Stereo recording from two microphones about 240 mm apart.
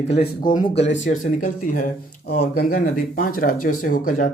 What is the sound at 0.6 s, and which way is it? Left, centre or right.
Speech, left.